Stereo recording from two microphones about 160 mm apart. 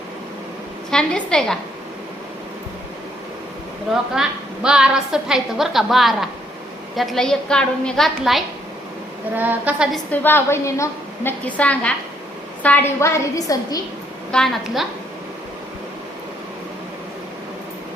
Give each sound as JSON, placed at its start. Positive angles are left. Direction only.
{"t": 0.9, "sound": "a woman's voice", "side_deg": 5}
{"t": 4.1, "sound": "a woman's voice", "side_deg": -5}
{"t": 10.1, "sound": "a woman's voice", "side_deg": 15}
{"t": 14.3, "sound": "a woman's voice", "side_deg": 5}